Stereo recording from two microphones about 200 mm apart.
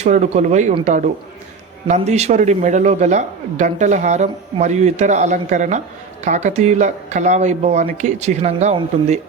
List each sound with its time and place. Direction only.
0.0 s speech: 35° right (ahead or behind)